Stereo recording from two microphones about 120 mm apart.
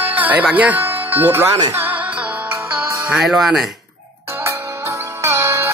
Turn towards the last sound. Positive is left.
turn(degrees=-20)  # may be behind; listen again after turning